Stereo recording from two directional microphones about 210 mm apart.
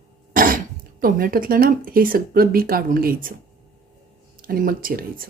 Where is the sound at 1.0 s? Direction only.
45° right (ahead or behind).